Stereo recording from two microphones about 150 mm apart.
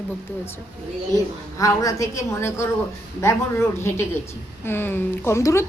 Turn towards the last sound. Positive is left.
turn(degrees=20)  # may be behind; listen again after turning